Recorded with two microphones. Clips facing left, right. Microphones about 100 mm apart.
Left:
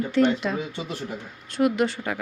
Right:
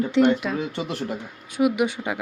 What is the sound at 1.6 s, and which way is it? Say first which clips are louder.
Speech: right 1 dB; 15° right (ahead or behind).